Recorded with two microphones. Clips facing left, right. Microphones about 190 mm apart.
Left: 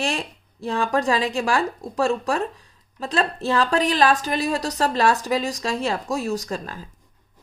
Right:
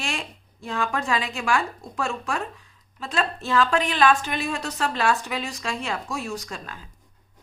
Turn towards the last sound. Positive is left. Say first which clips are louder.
# left 7 dB
turn(degrees=40)  # may be behind; listen again after turning